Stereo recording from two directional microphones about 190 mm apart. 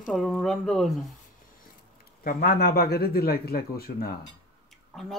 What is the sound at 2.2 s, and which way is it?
A man's voice, 50° left (ahead or behind).